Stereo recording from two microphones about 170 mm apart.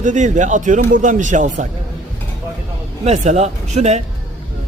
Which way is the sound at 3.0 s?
40° right (ahead or behind).